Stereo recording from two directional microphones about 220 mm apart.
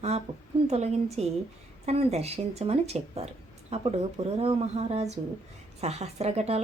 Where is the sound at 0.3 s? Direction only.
25° right (ahead or behind).